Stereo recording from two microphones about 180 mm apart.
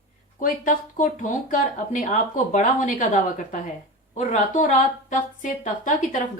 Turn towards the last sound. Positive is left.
turn(degrees=45)  # may be behind; listen again after turning